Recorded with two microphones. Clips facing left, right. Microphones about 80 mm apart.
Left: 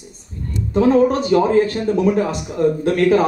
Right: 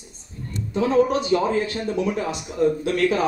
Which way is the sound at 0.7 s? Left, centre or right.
Left.